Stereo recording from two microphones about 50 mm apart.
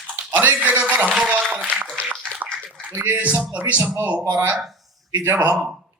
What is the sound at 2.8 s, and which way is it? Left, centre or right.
A man's voice, right.